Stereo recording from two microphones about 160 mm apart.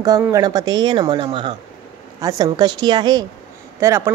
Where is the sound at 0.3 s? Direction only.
20° right (ahead or behind).